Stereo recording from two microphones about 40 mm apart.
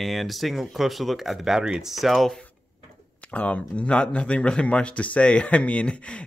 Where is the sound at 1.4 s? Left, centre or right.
Centre.